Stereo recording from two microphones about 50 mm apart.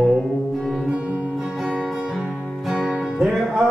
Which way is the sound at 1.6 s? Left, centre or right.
Centre.